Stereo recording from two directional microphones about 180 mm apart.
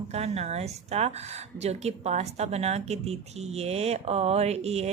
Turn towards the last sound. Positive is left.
turn(degrees=-35)  # may be behind; listen again after turning